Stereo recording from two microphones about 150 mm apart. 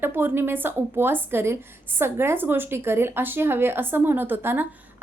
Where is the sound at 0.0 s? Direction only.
15° right (ahead or behind).